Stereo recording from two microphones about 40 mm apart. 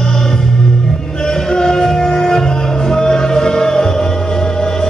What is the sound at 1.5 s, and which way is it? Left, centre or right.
Music, centre.